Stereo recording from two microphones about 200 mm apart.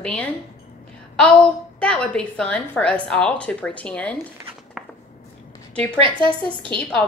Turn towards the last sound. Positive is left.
turn(degrees=-25)  # may be behind; listen again after turning